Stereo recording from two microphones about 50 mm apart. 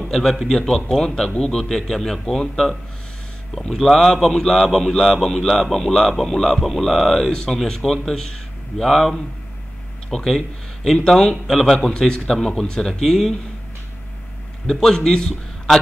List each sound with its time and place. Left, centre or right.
0.1 s a man's voice: centre
11.7 s a man's voice: centre
12.0 s a man's voice: centre
14.7 s a man's voice: centre